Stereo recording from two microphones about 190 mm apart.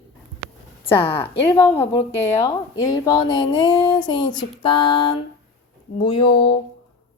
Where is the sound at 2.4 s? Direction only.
20° left (ahead or behind).